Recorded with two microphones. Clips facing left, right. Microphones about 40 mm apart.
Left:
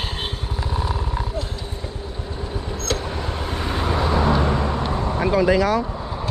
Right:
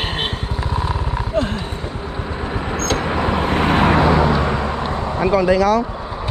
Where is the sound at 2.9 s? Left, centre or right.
Right.